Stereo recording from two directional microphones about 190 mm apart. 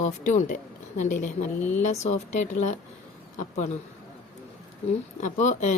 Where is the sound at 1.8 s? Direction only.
40° left (ahead or behind).